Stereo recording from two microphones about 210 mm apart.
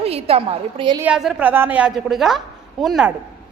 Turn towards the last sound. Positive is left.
turn(degrees=0)  # may be behind; listen again after turning